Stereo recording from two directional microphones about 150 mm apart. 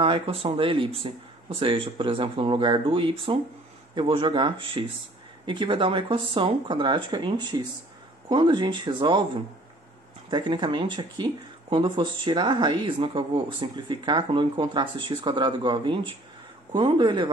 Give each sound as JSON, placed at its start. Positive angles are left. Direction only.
{"t": 0.0, "sound": "speech", "side_deg": -35}
{"t": 10.3, "sound": "speech", "side_deg": -30}